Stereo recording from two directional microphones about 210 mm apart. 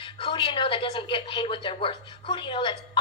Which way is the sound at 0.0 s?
25° left (ahead or behind).